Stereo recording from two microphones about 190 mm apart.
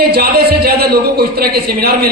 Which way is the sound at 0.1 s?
55° right (ahead or behind).